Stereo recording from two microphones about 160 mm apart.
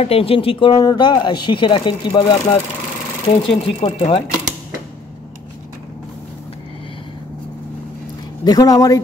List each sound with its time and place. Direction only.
0.0 s speech: 35° left (ahead or behind)
8.5 s speech: 20° left (ahead or behind)